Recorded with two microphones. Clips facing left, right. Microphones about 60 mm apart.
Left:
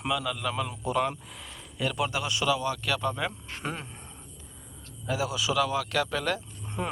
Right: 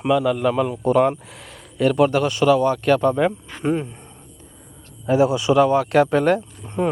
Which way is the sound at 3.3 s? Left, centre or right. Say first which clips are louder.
Right 13 dB; centre.